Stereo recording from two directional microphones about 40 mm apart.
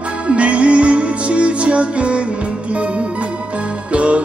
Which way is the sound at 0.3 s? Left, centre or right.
Right.